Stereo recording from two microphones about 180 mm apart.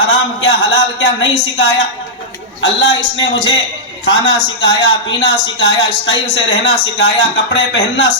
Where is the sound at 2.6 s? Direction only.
90° left.